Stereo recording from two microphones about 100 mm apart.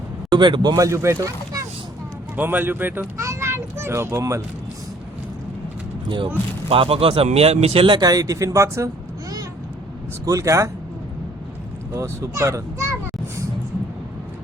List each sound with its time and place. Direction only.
0.3 s speech: 50° right (ahead or behind)
0.8 s a child's voice: 30° right (ahead or behind)
2.3 s a child's voice: 15° right (ahead or behind)
6.7 s speech: 70° right (ahead or behind)
8.0 s speech: 35° right (ahead or behind)
10.2 s speech: 30° right (ahead or behind)
11.9 s a child's voice: 30° right (ahead or behind)